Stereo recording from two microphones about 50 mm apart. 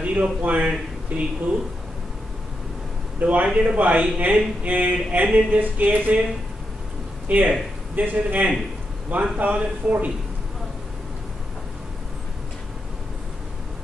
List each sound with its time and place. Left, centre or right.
0.0 s a sound: right
0.4 s a man's voice: right
3.2 s a man's voice: right
7.2 s a man's voice: right